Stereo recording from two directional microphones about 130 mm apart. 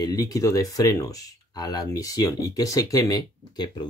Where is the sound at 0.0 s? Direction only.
30° left (ahead or behind).